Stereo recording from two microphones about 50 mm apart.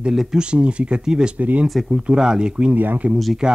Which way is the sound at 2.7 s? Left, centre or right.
Right.